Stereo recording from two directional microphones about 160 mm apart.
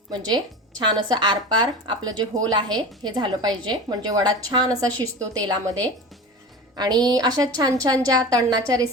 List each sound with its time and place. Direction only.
0.1 s a woman's voice: 25° right (ahead or behind)
6.7 s a woman's voice: 25° right (ahead or behind)